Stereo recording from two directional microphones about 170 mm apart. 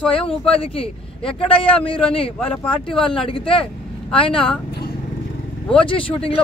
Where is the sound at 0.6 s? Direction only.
35° left (ahead or behind).